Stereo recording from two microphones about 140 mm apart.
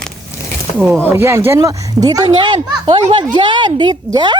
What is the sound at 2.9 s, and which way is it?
Speech, 45° right (ahead or behind).